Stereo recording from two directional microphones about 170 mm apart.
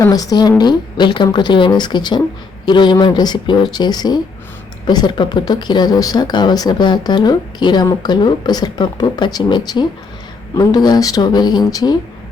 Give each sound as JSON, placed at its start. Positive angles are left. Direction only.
{"t": 0.0, "sound": "speech", "side_deg": 20}